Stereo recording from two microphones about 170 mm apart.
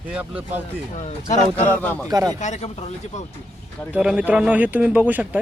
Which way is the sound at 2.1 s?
20° right (ahead or behind).